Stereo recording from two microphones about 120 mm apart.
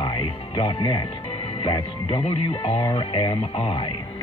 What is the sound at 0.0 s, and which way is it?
Music, 45° left (ahead or behind).